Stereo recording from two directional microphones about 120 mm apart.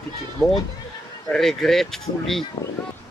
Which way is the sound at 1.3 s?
5° left (ahead or behind).